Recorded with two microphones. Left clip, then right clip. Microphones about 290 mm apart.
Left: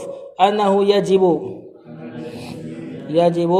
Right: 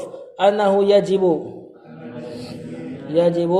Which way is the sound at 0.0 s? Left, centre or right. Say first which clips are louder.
Left 1 dB; centre.